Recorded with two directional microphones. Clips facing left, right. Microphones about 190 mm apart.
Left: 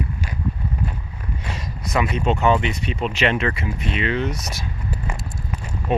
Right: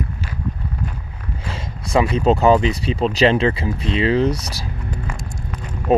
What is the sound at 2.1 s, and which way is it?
Speech, 35° right (ahead or behind).